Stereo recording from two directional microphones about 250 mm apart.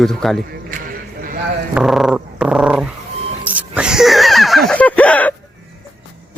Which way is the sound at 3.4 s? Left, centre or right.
Centre.